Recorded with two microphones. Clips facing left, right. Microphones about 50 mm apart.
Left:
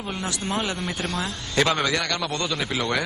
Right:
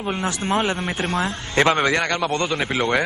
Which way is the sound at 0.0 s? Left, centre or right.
Right.